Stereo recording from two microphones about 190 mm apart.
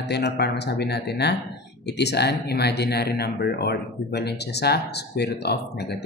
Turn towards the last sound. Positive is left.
turn(degrees=60)  # may be behind; listen again after turning